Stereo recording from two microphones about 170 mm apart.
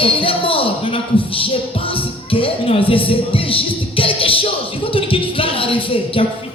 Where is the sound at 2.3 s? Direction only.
35° left (ahead or behind).